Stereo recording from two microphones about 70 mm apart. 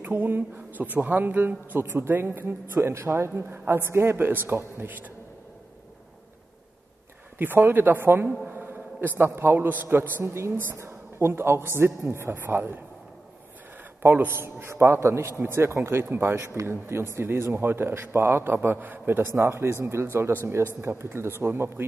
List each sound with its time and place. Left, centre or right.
0.0 s speech: right
7.3 s speech: right
14.0 s speech: right